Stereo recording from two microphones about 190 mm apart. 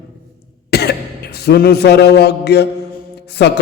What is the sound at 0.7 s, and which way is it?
Throat clearing, 60° left (ahead or behind).